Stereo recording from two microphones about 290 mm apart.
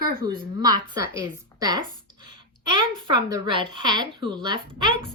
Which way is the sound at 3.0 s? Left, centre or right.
Centre.